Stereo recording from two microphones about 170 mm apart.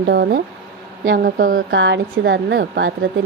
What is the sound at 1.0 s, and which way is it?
A woman's voice, 60° right (ahead or behind).